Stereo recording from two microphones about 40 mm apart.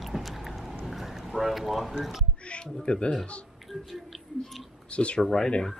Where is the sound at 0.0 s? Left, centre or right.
Centre.